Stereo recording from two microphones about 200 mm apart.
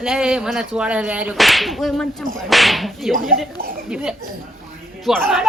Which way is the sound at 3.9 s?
5° right (ahead or behind).